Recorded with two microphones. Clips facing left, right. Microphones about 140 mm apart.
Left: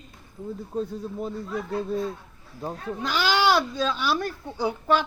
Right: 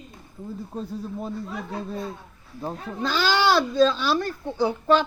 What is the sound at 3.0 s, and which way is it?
Speech, 15° left (ahead or behind).